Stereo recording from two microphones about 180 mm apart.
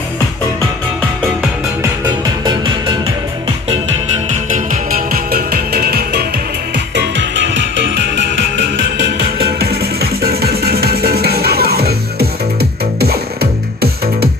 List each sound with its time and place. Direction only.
4.3 s music: 50° right (ahead or behind)
8.9 s music: 60° right (ahead or behind)